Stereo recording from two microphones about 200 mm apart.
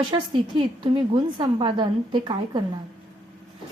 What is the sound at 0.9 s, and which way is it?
A woman's voice, 25° right (ahead or behind).